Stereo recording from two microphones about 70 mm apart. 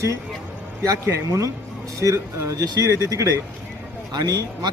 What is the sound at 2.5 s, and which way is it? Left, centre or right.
A man's voice, right.